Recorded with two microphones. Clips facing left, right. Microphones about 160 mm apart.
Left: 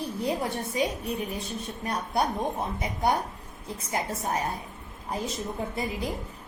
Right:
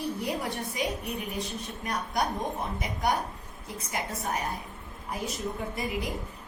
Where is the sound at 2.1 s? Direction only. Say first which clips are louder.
Left 3 dB; 30° left (ahead or behind).